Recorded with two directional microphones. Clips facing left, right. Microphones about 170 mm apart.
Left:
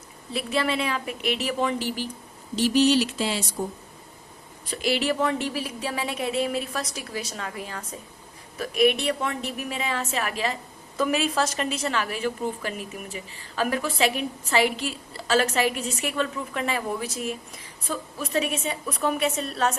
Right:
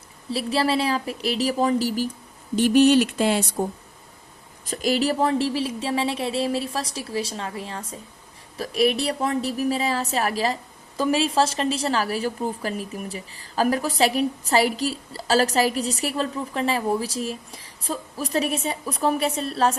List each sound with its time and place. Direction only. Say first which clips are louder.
0.3 s a woman's voice: right 3 dB; 30° right (ahead or behind)
2.6 s a sound: right 4 dB; 55° right (ahead or behind)
4.6 s a woman's voice: right 3 dB; 45° right (ahead or behind)